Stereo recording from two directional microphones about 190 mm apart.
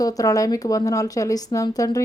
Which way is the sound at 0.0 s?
20° left (ahead or behind).